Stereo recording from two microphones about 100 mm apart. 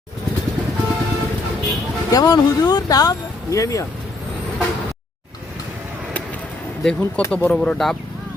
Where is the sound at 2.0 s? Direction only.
40° left (ahead or behind).